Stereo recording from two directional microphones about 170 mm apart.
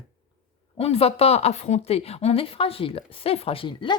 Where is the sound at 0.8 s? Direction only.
35° left (ahead or behind).